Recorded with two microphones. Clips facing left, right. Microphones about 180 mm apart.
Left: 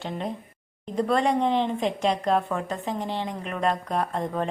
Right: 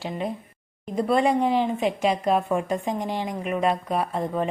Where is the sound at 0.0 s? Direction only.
5° right (ahead or behind).